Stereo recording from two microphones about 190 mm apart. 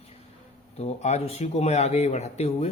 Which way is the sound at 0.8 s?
35° left (ahead or behind).